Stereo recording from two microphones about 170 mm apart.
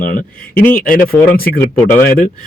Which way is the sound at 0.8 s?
55° left (ahead or behind).